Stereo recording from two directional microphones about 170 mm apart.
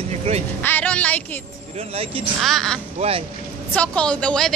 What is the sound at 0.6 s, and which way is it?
Speech, 10° left (ahead or behind).